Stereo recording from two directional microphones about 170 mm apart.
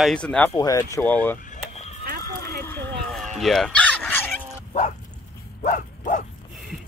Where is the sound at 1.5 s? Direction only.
40° left (ahead or behind).